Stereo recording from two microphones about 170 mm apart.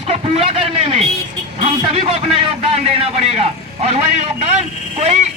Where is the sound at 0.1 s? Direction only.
35° right (ahead or behind).